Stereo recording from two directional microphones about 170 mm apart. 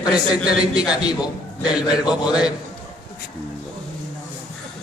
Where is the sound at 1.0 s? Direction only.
25° left (ahead or behind).